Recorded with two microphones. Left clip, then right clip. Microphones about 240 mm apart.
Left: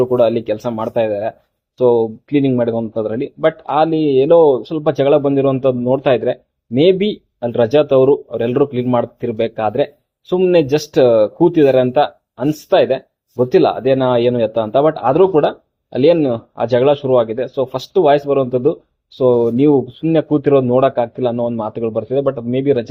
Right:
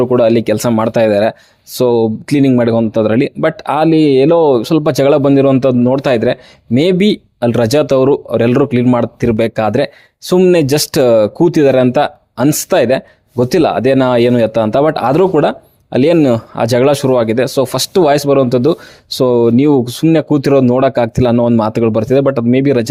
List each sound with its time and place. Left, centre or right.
0.0 s speech: right